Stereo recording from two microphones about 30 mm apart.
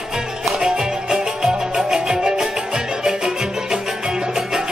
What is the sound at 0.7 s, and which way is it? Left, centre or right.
Music, centre.